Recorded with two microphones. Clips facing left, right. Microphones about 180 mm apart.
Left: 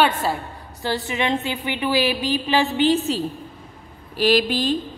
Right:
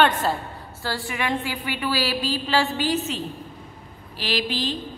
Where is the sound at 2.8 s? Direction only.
30° left (ahead or behind).